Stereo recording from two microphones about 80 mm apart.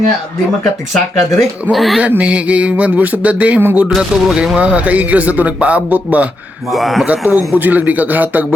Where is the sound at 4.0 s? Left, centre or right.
Centre.